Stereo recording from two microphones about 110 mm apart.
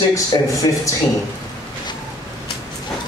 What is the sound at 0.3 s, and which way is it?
Speech, 35° left (ahead or behind).